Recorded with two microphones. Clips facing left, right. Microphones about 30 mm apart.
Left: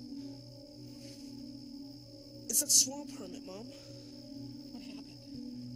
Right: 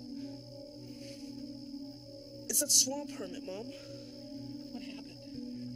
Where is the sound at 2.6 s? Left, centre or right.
Centre.